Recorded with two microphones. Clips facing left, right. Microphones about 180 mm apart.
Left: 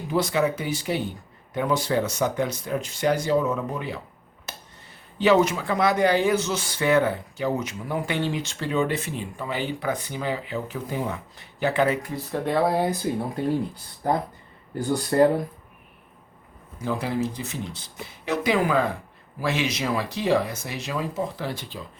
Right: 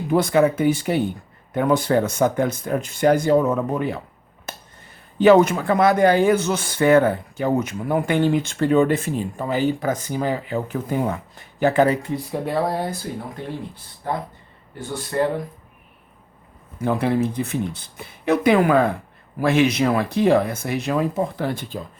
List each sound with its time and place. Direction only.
0.1 s speech: 55° right (ahead or behind)
4.5 s finger snapping: 55° right (ahead or behind)
5.1 s speech: 50° right (ahead or behind)
12.3 s speech: 5° right (ahead or behind)
12.6 s speech: 5° left (ahead or behind)
14.8 s speech: 35° left (ahead or behind)
16.7 s speech: 60° right (ahead or behind)